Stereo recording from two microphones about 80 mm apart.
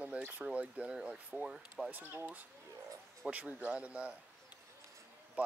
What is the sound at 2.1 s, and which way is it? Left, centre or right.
Speech, right.